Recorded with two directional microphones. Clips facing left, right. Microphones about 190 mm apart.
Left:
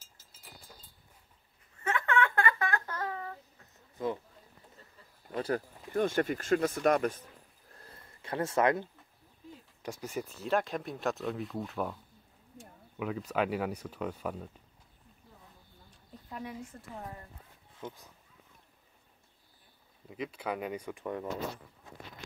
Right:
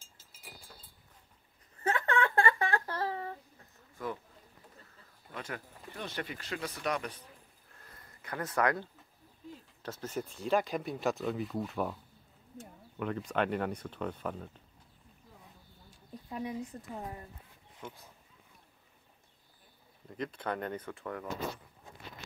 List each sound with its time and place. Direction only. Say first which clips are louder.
1.8 s a sound: even; 35° right (ahead or behind)
4.0 s speech: left 5 dB; 20° left (ahead or behind)
5.3 s speech: left 10 dB; 35° left (ahead or behind)
7.7 s a sound: left 3 dB; 30° left (ahead or behind)
9.8 s speech: left 1 dB; 10° left (ahead or behind)
16.3 s a woman's voice: right 4 dB; 20° right (ahead or behind)
17.7 s speech: left 3 dB; 15° left (ahead or behind)
20.1 s speech: even; 5° left (ahead or behind)